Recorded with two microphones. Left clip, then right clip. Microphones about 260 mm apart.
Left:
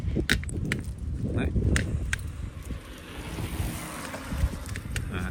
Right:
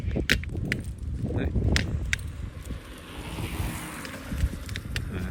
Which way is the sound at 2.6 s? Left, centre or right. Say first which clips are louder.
Even; right.